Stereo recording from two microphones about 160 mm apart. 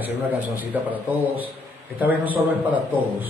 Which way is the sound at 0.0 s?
10° right (ahead or behind).